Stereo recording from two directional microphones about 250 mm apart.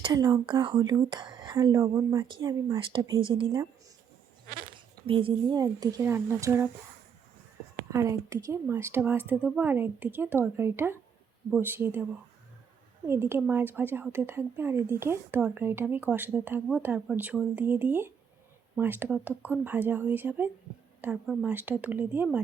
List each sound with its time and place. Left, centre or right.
0.0 s a woman's voice: centre
5.0 s a woman's voice: right
7.9 s a woman's voice: centre
13.1 s a woman's voice: centre